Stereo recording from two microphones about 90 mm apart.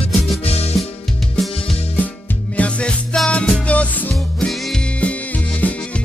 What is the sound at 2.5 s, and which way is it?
Music, 15° left (ahead or behind).